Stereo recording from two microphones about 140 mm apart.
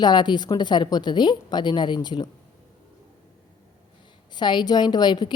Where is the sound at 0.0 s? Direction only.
30° left (ahead or behind).